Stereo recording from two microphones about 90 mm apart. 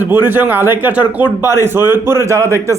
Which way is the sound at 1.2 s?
65° left (ahead or behind).